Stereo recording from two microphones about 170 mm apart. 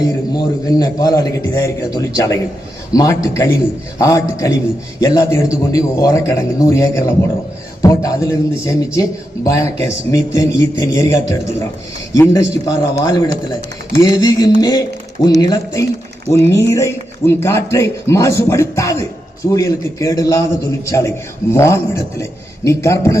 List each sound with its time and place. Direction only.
0.3 s a man's voice: 20° left (ahead or behind)